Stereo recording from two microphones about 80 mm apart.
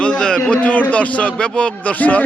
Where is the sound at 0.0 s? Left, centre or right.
Centre.